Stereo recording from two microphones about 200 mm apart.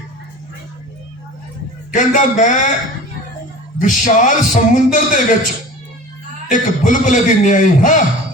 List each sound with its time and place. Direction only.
1.9 s speech: 40° left (ahead or behind)
3.8 s speech: 40° left (ahead or behind)
6.5 s speech: 40° left (ahead or behind)